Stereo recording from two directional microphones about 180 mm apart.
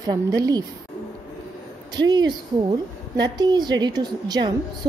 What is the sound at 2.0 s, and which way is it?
Speech, 25° right (ahead or behind).